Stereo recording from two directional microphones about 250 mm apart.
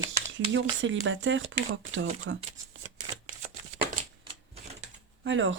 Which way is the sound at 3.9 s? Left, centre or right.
Right.